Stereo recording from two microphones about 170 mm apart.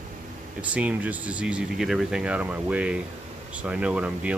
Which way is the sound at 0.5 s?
10° right (ahead or behind).